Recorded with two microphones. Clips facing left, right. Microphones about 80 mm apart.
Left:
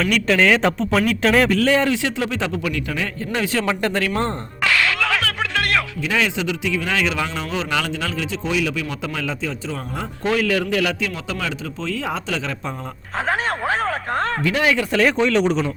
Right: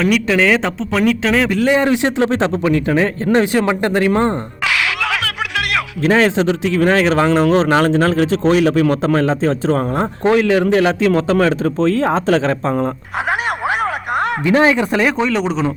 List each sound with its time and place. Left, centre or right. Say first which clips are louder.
0.0 s a man's voice: right 3 dB; centre
1.5 s a man's voice: right 3 dB; centre
3.3 s a man's voice: right 6 dB; right
4.2 s a sound: right 5 dB; centre
6.0 s a man's voice: right 8 dB; right
10.2 s speech: right 7 dB; right
13.7 s a sound: right 4 dB; centre
14.5 s a man's voice: right 8 dB; right
15.0 s a man's voice: right 1 dB; centre